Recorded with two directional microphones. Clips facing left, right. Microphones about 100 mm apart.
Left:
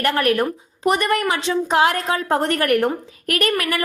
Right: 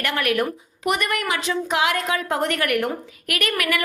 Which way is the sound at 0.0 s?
35° left (ahead or behind).